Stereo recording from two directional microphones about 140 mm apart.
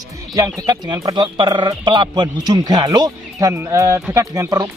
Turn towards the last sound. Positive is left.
turn(degrees=-25)  # may be behind; listen again after turning